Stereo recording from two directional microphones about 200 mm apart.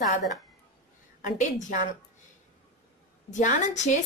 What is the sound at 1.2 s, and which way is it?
Speech, 40° left (ahead or behind).